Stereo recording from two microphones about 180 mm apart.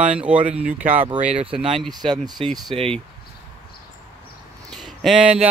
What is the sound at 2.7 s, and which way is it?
Speech, 30° right (ahead or behind).